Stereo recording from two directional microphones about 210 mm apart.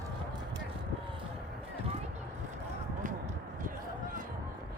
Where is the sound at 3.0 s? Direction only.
40° right (ahead or behind).